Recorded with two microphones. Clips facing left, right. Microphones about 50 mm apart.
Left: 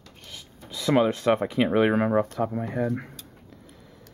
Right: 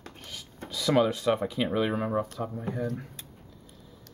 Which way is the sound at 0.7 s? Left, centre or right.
Centre.